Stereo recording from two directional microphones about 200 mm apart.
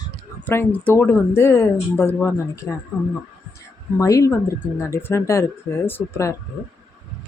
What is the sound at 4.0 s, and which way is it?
A woman's voice, 15° left (ahead or behind).